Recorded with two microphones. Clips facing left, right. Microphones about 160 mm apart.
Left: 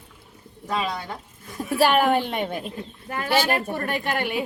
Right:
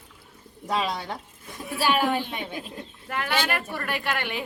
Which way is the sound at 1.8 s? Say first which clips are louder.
Left 5 dB; 55° left (ahead or behind).